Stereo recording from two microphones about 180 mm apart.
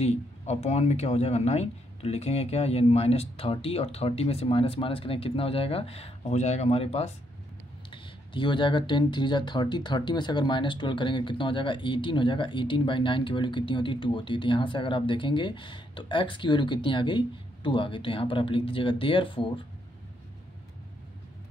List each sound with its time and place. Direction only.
0.0 s speech: 35° left (ahead or behind)